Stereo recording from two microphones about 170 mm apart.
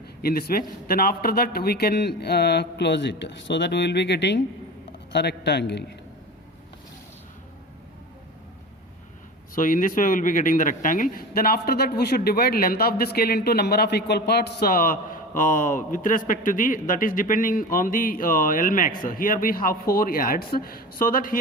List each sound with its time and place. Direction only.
0.2 s a man's voice: 65° left (ahead or behind); by 5.8 s 80° left
9.6 s a man's voice: 50° left (ahead or behind)